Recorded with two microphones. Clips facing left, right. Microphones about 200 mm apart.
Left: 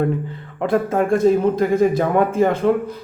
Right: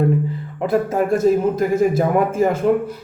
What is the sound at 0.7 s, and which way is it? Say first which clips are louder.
A man's voice: even; 5° right (ahead or behind).